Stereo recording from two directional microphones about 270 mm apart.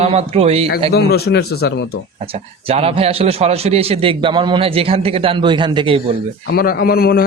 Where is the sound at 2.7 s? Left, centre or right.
Right.